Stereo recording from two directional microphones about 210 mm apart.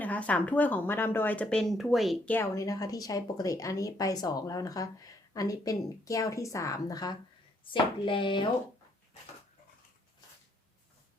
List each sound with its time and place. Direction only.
0.0 s speech: 5° left (ahead or behind); by 8.4 s 25° left (ahead or behind)